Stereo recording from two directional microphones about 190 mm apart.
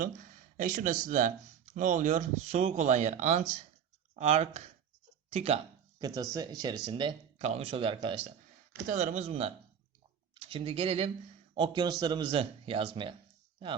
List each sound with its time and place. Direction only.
0.5 s speech: 45° right (ahead or behind)
6.0 s speech: 20° right (ahead or behind)
8.9 s speech: 40° right (ahead or behind)